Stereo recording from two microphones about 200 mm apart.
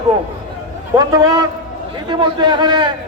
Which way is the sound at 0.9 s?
20° right (ahead or behind).